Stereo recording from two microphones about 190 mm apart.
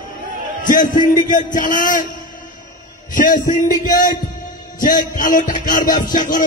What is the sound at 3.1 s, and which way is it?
Speech, 45° left (ahead or behind).